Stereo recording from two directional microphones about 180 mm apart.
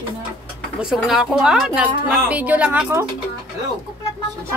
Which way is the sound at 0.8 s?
5° right (ahead or behind).